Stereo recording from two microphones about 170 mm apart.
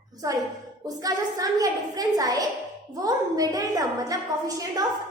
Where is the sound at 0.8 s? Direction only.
20° right (ahead or behind).